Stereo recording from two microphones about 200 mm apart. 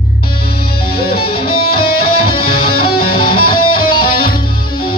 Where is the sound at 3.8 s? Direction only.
50° left (ahead or behind).